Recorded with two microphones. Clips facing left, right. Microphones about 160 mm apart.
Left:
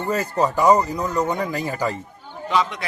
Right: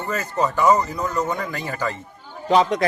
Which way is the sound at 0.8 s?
10° left (ahead or behind).